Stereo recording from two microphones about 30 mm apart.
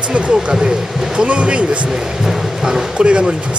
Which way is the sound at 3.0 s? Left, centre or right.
Right.